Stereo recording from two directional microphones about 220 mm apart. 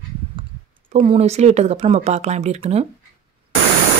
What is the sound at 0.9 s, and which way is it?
Speech, 25° right (ahead or behind).